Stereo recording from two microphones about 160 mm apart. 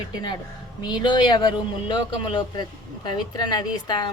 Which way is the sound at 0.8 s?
30° left (ahead or behind).